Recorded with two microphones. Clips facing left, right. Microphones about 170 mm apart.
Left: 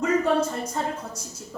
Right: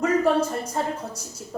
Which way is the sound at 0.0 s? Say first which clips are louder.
Right 1 dB; 30° right (ahead or behind).